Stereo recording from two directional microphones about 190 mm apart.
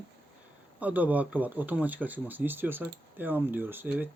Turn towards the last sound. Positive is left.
turn(degrees=-10)  # may be behind; listen again after turning